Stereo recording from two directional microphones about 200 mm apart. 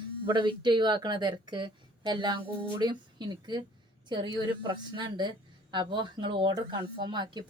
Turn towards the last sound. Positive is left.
turn(degrees=-20)  # may be behind; listen again after turning